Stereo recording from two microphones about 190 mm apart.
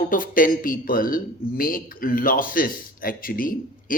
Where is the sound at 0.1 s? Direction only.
45° left (ahead or behind).